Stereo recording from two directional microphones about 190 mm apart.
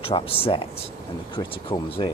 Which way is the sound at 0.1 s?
30° left (ahead or behind).